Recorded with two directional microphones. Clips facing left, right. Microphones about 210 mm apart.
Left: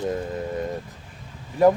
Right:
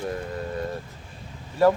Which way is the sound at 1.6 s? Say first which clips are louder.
Left 2 dB; 20° left (ahead or behind).